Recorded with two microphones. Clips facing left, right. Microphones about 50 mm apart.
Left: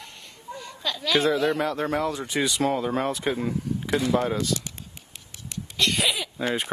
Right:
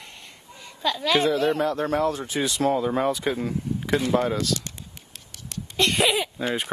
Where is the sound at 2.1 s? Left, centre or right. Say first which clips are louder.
Right 2 dB; centre.